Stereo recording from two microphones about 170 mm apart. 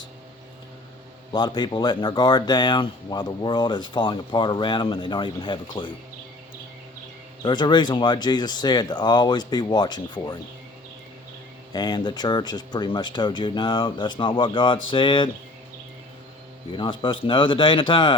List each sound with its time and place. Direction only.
1.3 s speech: 25° left (ahead or behind)
7.4 s speech: 25° left (ahead or behind)
11.7 s speech: 25° left (ahead or behind)
16.7 s speech: 30° left (ahead or behind)